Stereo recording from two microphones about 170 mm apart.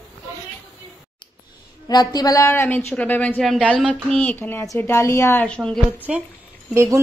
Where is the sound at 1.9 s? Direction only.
25° left (ahead or behind); by 5.8 s 5° left (ahead or behind).